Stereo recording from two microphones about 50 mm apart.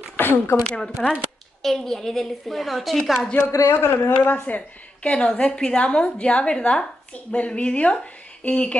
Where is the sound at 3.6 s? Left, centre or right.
Left.